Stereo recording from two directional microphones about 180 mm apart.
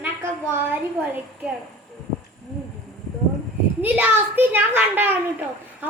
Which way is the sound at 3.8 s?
10° right (ahead or behind).